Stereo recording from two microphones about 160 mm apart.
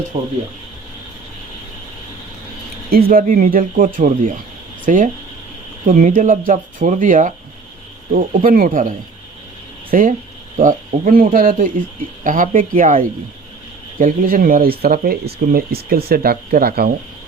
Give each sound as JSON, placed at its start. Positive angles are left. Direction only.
{"t": 0.1, "sound": "speech", "side_deg": -35}
{"t": 3.1, "sound": "speech", "side_deg": -60}
{"t": 9.9, "sound": "speech", "side_deg": -55}